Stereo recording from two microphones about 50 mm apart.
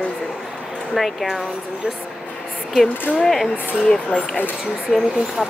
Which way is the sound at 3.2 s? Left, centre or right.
Centre.